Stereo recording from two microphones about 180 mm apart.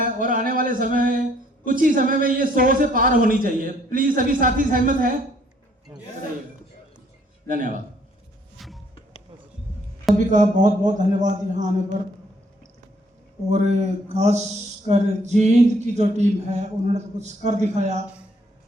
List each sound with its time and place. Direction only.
0.0 s speech: 50° right (ahead or behind)
7.4 s a man's voice: 50° right (ahead or behind)
8.5 s music: centre (ahead or behind)
10.2 s speech: 45° right (ahead or behind)
13.5 s a sound: 40° right (ahead or behind)